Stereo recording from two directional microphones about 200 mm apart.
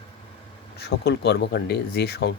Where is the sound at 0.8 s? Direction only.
55° left (ahead or behind).